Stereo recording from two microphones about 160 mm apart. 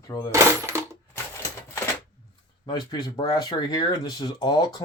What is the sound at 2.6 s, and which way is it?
Speech, 25° left (ahead or behind).